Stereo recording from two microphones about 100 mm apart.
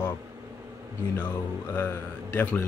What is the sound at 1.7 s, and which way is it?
Speech, 20° left (ahead or behind).